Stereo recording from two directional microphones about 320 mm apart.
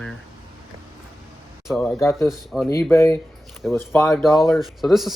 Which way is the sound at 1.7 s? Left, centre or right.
Centre.